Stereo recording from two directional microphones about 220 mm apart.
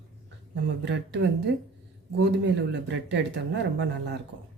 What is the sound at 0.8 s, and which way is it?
Speech, 50° right (ahead or behind).